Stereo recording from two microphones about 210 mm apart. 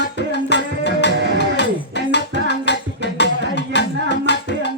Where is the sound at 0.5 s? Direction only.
55° left (ahead or behind).